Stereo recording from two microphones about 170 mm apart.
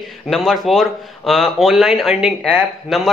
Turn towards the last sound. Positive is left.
turn(degrees=0)  # may be behind; listen again after turning